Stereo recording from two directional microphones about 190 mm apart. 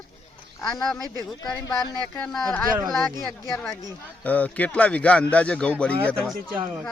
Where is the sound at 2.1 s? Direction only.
5° left (ahead or behind).